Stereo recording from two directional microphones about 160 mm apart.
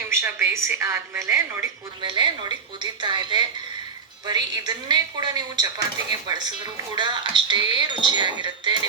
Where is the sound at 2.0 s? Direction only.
30° right (ahead or behind).